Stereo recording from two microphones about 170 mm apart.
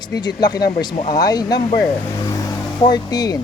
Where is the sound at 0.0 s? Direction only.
25° left (ahead or behind).